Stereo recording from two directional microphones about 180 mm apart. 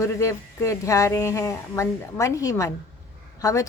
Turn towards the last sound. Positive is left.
turn(degrees=15)  # may be behind; listen again after turning